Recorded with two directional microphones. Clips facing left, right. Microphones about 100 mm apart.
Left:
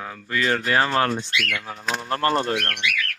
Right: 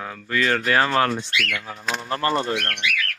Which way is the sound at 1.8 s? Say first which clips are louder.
Left 1 dB; 5° left (ahead or behind).